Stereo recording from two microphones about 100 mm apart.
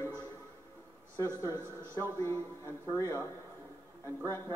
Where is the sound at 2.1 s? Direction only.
30° left (ahead or behind).